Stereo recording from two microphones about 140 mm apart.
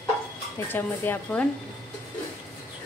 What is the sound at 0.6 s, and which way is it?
Speech, 15° left (ahead or behind).